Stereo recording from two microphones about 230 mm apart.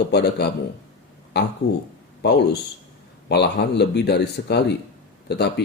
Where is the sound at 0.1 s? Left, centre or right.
Left.